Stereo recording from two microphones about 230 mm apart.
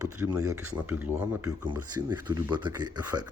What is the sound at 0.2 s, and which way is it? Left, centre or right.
Speech, centre.